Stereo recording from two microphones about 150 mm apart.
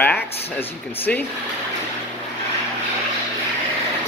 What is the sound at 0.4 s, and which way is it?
Speech, 15° left (ahead or behind).